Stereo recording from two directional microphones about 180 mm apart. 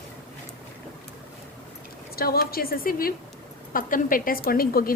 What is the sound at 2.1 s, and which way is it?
A woman's voice, 55° left (ahead or behind).